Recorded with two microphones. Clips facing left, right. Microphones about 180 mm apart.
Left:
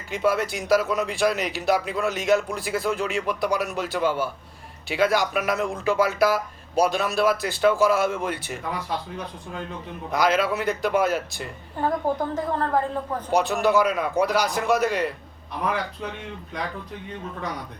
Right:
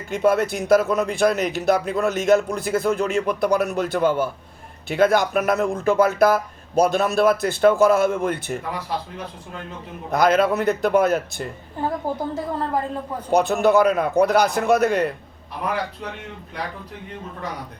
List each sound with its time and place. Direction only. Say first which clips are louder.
0.1 s a man's voice: right 4 dB; 50° right (ahead or behind)
10.1 s a man's voice: right 4 dB; 50° right (ahead or behind)
12.0 s a woman's voice: left 1 dB; 10° right (ahead or behind)
13.3 s a man's voice: right 4 dB; 50° right (ahead or behind)